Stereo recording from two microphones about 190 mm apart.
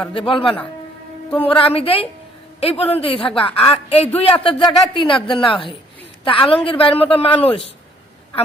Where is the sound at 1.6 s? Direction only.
30° left (ahead or behind).